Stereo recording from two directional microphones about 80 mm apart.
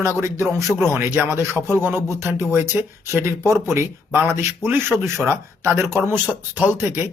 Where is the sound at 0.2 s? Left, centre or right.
Right.